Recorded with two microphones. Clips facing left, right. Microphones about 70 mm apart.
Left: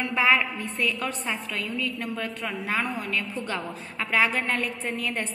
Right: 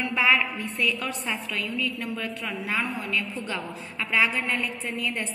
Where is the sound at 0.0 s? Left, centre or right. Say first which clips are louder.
Left 1 dB; left.